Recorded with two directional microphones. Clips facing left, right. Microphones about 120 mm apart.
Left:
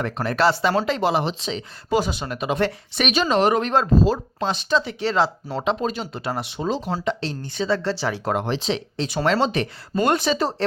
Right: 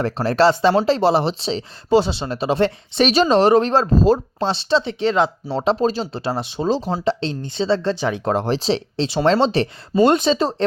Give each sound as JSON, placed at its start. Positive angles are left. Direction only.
{"t": 0.0, "sound": "speech", "side_deg": -30}
{"t": 5.5, "sound": "speech", "side_deg": -35}